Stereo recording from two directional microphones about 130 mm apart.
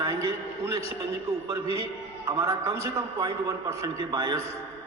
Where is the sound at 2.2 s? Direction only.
25° right (ahead or behind).